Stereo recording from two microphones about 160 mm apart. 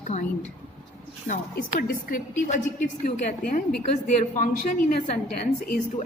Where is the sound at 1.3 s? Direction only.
55° left (ahead or behind).